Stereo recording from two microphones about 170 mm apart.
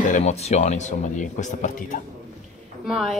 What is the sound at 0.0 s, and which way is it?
Speech, 45° left (ahead or behind).